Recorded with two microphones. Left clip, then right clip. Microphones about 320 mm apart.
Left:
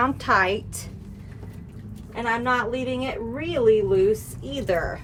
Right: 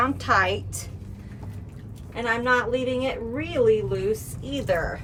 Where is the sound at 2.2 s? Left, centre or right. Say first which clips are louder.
Right 1 dB; centre.